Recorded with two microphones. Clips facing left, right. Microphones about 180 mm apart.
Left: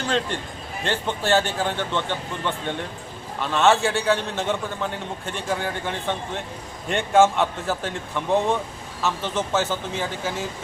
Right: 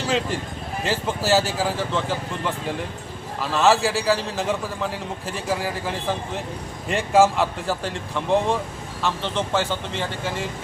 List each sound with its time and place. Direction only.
0.9 s a man's voice: 5° right (ahead or behind)